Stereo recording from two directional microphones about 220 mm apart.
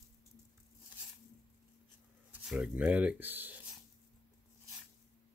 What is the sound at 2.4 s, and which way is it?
Speech, 5° right (ahead or behind).